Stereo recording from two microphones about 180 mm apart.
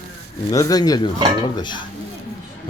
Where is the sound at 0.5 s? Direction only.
20° left (ahead or behind).